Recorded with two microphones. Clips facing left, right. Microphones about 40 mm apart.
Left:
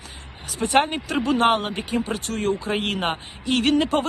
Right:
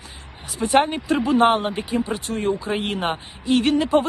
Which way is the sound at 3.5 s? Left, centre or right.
Left.